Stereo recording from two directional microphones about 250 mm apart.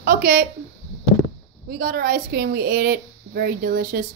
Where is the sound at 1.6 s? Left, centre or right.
Right.